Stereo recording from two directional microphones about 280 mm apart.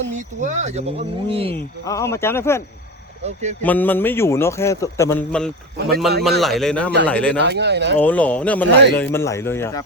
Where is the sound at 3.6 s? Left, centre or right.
Centre.